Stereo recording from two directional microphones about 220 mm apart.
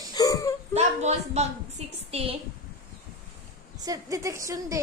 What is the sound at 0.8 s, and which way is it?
A woman's voice, 30° right (ahead or behind).